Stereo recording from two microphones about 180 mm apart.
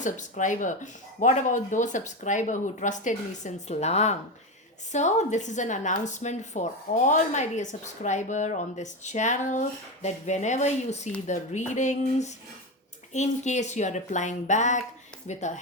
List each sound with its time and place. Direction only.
0.0 s a woman's voice: 45° left (ahead or behind)